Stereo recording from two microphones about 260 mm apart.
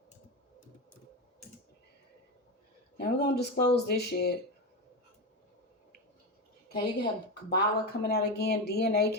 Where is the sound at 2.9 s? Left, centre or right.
Left.